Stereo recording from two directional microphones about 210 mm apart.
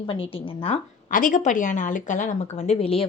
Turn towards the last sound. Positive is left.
turn(degrees=25)  # may be behind; listen again after turning